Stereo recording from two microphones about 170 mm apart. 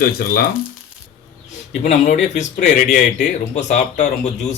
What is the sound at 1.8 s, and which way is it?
Speech, 45° left (ahead or behind).